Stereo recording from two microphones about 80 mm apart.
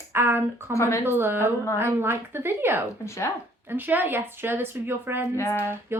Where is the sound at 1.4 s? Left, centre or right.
Left.